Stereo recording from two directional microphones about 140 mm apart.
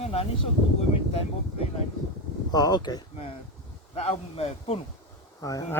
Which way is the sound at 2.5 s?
30° left (ahead or behind).